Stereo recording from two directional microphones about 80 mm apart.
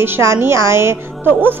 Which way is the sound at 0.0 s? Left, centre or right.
Right.